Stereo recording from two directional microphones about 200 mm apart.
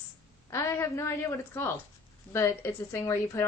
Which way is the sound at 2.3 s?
15° left (ahead or behind).